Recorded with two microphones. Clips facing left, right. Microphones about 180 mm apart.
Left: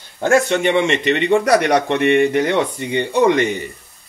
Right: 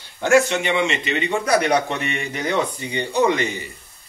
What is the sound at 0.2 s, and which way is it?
A man's voice, 50° left (ahead or behind).